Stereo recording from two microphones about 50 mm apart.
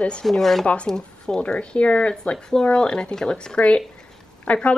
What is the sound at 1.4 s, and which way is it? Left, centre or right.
Speech, left.